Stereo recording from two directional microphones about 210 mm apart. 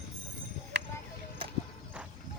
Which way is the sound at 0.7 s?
55° right (ahead or behind).